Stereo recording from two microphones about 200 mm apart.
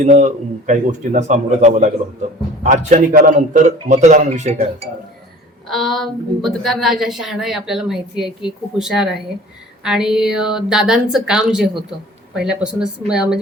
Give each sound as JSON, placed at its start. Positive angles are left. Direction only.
{"t": 0.0, "sound": "a man's voice", "side_deg": -35}
{"t": 5.6, "sound": "a woman's voice", "side_deg": 0}